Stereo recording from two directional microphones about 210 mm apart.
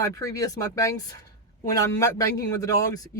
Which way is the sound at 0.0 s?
15° left (ahead or behind).